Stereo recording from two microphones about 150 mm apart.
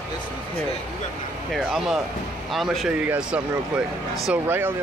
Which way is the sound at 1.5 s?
Centre (ahead or behind).